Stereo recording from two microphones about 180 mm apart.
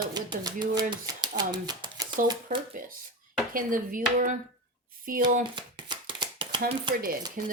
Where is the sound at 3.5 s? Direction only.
50° right (ahead or behind).